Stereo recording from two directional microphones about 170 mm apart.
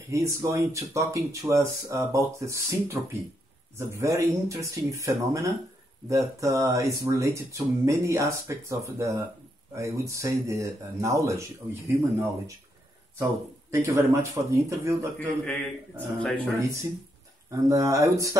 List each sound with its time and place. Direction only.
0.1 s speech: 15° right (ahead or behind)
16.2 s speech: 5° left (ahead or behind)
17.6 s speech: 20° right (ahead or behind)